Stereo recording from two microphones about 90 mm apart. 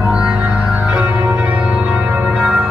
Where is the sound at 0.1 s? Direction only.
15° right (ahead or behind).